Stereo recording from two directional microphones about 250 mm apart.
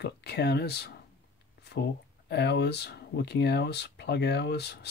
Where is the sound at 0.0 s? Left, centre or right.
Left.